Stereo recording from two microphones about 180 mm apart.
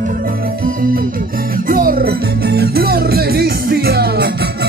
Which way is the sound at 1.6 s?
50° right (ahead or behind).